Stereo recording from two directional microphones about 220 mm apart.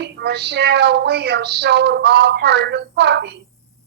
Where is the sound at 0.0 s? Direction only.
50° right (ahead or behind).